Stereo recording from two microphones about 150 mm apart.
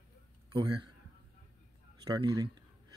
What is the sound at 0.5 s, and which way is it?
Speech, 30° right (ahead or behind).